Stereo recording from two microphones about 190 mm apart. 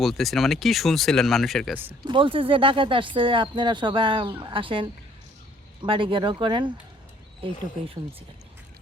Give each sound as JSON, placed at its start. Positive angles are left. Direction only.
{"t": 0.0, "sound": "speech", "side_deg": 0}
{"t": 2.0, "sound": "speech", "side_deg": -25}